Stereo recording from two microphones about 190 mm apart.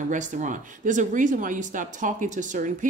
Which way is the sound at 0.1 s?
40° right (ahead or behind).